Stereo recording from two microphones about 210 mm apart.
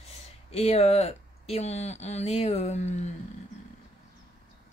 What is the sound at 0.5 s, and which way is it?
Speech, 30° left (ahead or behind).